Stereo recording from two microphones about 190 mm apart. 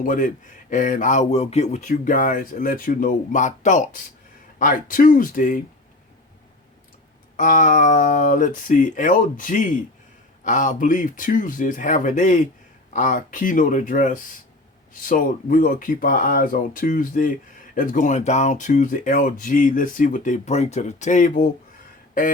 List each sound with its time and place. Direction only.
0.0 s speech: 45° left (ahead or behind)
7.3 s speech: 40° left (ahead or behind)